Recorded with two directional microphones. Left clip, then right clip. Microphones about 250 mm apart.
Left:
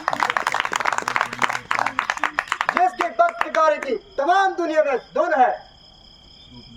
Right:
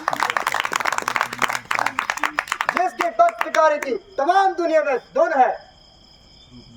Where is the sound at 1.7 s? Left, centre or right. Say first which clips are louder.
Even; right.